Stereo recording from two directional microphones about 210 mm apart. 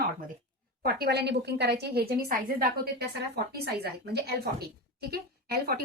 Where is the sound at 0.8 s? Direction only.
50° right (ahead or behind).